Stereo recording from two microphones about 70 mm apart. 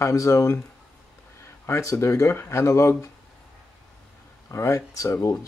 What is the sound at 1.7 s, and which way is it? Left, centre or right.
Speech, left.